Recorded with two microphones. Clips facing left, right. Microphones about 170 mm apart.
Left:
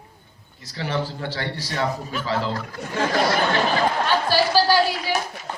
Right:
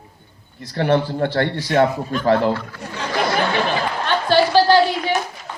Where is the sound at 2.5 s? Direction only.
40° left (ahead or behind).